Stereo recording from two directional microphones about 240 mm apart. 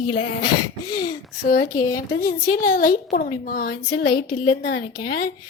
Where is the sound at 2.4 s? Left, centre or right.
Left.